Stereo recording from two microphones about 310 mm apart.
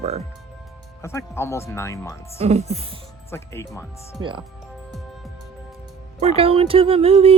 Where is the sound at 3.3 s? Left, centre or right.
Centre.